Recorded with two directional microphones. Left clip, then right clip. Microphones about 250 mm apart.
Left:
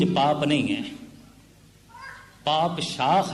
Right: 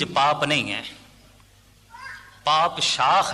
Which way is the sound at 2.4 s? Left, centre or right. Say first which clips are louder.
Right 4 dB; right.